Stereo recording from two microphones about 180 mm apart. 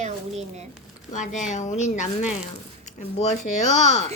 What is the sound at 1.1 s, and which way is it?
Speech, 45° left (ahead or behind).